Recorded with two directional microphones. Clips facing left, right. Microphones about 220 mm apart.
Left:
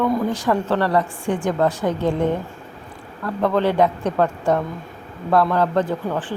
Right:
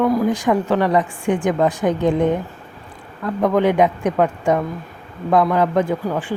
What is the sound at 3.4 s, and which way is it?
A woman's voice, 15° right (ahead or behind).